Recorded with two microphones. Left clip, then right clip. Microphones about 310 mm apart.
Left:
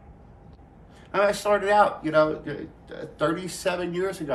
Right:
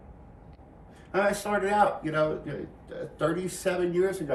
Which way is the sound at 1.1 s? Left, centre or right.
Centre.